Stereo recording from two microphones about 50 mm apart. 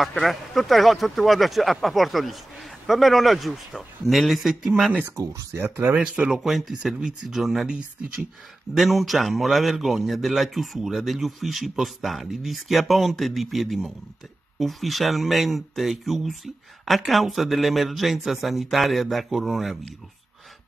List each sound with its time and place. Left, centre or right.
0.0 s a man's voice: centre
5.0 s speech: right
5.6 s speech: right
5.9 s speech: right
6.3 s a man's voice: centre
8.7 s a man's voice: centre